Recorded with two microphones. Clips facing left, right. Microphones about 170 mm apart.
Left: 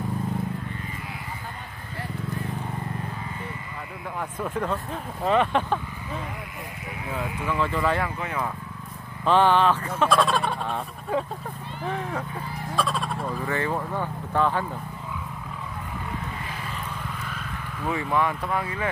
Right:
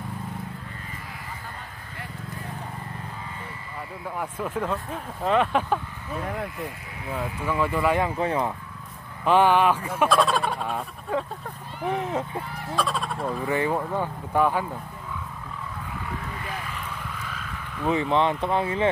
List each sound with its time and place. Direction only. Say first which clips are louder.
4.2 s speech: even; 5° right (ahead or behind)
7.4 s speech: right 2 dB; 10° right (ahead or behind)
8.2 s speech: right 5 dB; 30° right (ahead or behind)
9.2 s speech: right 1 dB; 10° right (ahead or behind)
10.0 s a sound: even; centre (ahead or behind)
11.8 s speech: right 3 dB; 20° right (ahead or behind)
12.7 s a sound: even; centre (ahead or behind)
13.5 s speech: right 3 dB; 15° right (ahead or behind)
17.8 s speech: right 3 dB; 20° right (ahead or behind)